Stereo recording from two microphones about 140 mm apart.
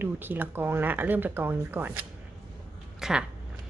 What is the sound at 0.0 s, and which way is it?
A woman's voice, 15° right (ahead or behind).